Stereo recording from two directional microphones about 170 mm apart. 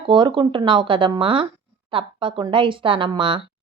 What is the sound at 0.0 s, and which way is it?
Speech, 30° right (ahead or behind).